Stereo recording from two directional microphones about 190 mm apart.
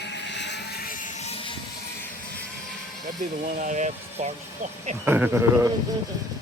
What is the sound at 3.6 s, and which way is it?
Speech, 40° right (ahead or behind).